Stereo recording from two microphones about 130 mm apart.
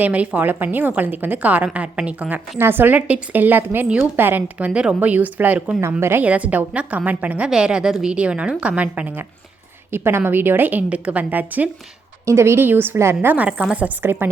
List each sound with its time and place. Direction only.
0.0 s a woman's voice: 10° right (ahead or behind)